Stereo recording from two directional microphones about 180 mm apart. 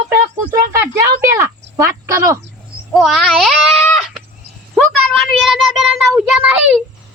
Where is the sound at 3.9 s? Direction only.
Centre (ahead or behind).